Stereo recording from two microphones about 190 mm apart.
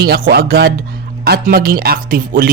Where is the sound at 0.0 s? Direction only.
55° right (ahead or behind).